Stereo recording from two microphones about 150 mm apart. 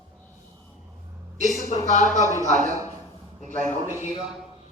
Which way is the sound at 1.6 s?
55° left (ahead or behind).